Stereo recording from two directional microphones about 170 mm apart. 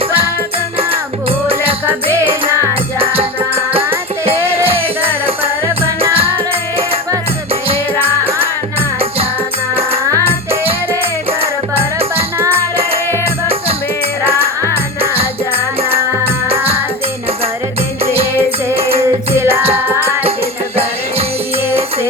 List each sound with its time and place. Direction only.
0.8 s music: 35° right (ahead or behind)
1.9 s music: 15° right (ahead or behind)
3.0 s music: 35° right (ahead or behind)
8.2 s music: 35° right (ahead or behind)
10.7 s music: 35° right (ahead or behind)
13.2 s music: 35° right (ahead or behind)
15.2 s music: 35° right (ahead or behind)
18.0 s music: 35° right (ahead or behind)
19.4 s music: 15° right (ahead or behind)